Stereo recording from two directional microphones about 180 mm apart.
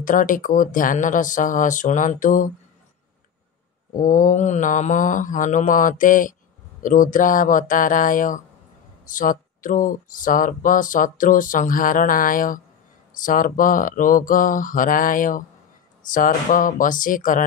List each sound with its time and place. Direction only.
0.0 s speech: 45° left (ahead or behind)
3.9 s speech: 50° left (ahead or behind)